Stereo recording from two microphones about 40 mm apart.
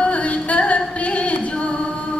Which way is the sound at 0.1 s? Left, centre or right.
Left.